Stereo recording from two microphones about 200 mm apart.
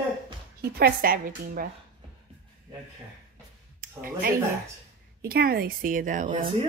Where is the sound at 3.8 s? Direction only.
50° right (ahead or behind).